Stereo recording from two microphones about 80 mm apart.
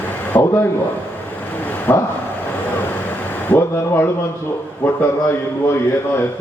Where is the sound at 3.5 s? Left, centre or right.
Left.